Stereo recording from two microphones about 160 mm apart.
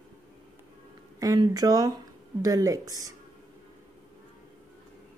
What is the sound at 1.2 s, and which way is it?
Speech, 25° right (ahead or behind).